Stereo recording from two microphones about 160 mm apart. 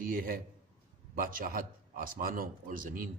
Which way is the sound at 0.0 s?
65° right (ahead or behind).